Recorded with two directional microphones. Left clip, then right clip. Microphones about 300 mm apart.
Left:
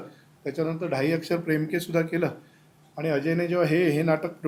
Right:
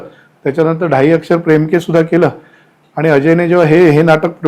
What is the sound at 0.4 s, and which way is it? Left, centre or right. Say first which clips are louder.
A man's voice: right 16 dB; right.